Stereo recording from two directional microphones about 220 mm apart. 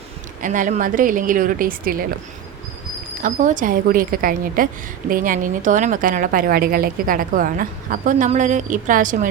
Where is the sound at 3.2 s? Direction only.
35° right (ahead or behind).